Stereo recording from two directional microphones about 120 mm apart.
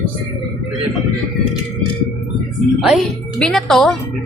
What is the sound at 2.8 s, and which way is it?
A woman's voice, 5° right (ahead or behind).